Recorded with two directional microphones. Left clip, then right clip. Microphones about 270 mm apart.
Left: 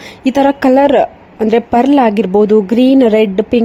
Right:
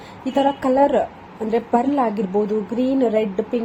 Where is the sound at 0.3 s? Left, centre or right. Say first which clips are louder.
Left 7 dB; left.